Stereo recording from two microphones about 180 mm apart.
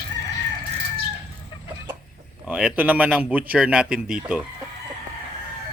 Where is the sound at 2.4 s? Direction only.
5° right (ahead or behind).